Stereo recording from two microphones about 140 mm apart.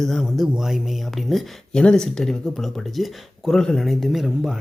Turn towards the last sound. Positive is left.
turn(degrees=0)  # may be behind; listen again after turning